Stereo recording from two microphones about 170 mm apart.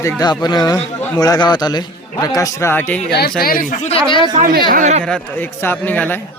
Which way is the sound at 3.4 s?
55° left (ahead or behind).